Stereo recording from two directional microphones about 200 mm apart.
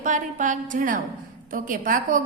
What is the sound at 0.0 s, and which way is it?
A woman's voice, 40° right (ahead or behind).